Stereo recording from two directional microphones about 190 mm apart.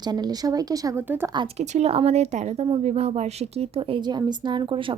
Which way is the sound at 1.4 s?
35° right (ahead or behind).